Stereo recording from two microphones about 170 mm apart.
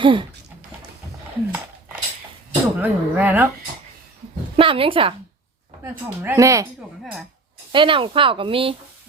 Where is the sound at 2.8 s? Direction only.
10° right (ahead or behind).